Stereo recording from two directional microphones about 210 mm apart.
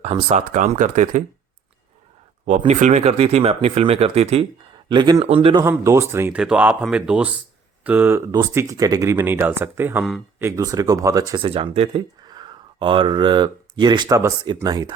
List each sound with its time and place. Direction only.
0.0 s speech: 30° right (ahead or behind)
2.5 s speech: 35° right (ahead or behind)
5.6 s speech: 15° right (ahead or behind)
10.5 s speech: 15° right (ahead or behind)